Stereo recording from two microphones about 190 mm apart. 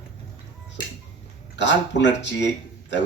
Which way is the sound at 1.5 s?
65° left (ahead or behind).